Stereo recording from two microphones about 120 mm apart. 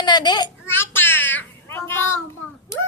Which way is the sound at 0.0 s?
35° left (ahead or behind).